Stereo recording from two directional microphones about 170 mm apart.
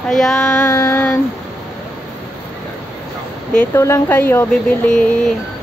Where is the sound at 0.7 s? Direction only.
15° left (ahead or behind).